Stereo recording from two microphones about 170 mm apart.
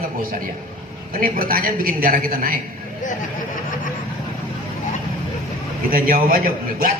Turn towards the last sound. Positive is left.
turn(degrees=-55)  # may be behind; listen again after turning